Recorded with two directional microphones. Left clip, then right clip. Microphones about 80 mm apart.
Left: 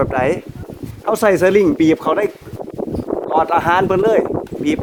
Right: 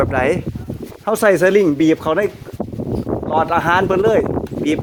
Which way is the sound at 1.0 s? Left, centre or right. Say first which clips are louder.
Even; centre.